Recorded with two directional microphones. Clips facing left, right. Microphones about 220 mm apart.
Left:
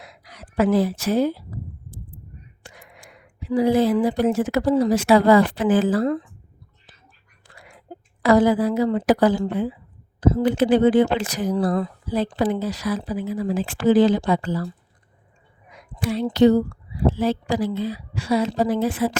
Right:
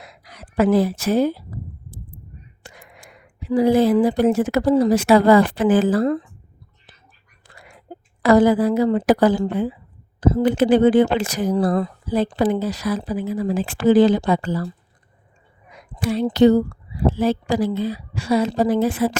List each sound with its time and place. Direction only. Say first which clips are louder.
0.2 s speech: right 2 dB; 50° right (ahead or behind)
3.5 s speech: right 3 dB; 45° right (ahead or behind)
8.2 s speech: right 2 dB; 45° right (ahead or behind)
16.0 s speech: right 2 dB; 45° right (ahead or behind)